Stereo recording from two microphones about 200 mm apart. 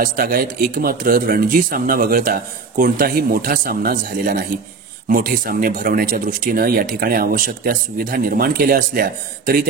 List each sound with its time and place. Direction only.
0.0 s speech: 45° right (ahead or behind)